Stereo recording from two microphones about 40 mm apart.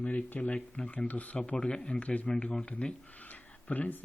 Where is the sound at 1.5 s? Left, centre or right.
Left.